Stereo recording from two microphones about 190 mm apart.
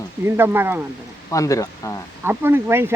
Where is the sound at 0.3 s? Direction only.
10° right (ahead or behind).